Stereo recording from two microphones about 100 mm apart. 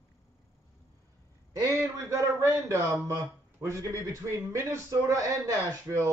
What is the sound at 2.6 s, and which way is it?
Speech, 30° right (ahead or behind).